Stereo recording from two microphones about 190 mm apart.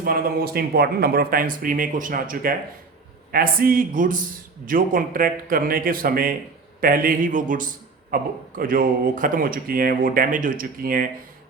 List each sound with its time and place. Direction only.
0.0 s speech: 50° right (ahead or behind)